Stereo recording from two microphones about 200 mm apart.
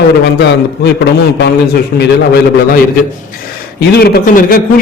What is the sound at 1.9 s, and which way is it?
Speech, 50° left (ahead or behind).